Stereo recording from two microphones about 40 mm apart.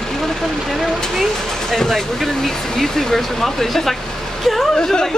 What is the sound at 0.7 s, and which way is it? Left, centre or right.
A woman's voice, centre.